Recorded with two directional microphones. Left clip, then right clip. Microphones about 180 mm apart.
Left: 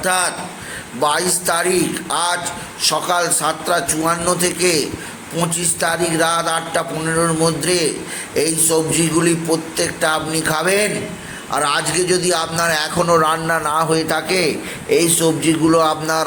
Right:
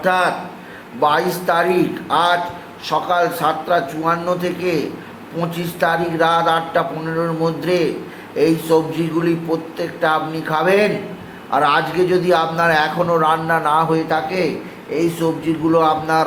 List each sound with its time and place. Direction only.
0.0 s a man's voice: 20° left (ahead or behind)